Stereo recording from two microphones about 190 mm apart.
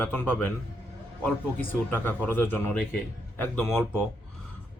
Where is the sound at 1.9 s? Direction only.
10° left (ahead or behind).